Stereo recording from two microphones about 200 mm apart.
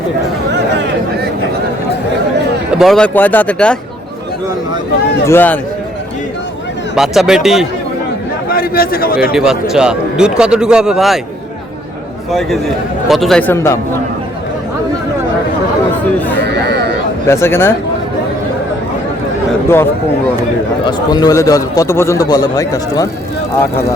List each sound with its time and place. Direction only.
0.5 s a sound: 60° right (ahead or behind)
2.7 s speech: centre (ahead or behind)
5.2 s a man's voice: 10° left (ahead or behind)
6.9 s speech: centre (ahead or behind)
8.4 s a man's voice: 45° left (ahead or behind)
9.3 s speech: 5° right (ahead or behind)
12.3 s speech: centre (ahead or behind)
16.5 s a sound: 55° right (ahead or behind)
17.2 s a man's voice: 15° left (ahead or behind)
20.8 s a man's voice: 20° left (ahead or behind)